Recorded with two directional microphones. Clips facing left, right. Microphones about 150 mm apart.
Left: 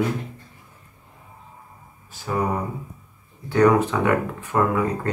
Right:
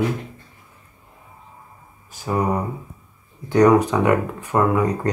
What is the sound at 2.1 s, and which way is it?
Speech, 15° right (ahead or behind).